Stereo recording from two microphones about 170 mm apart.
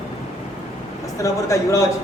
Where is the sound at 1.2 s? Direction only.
20° left (ahead or behind).